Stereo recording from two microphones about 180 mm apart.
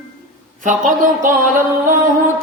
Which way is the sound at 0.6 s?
45° right (ahead or behind).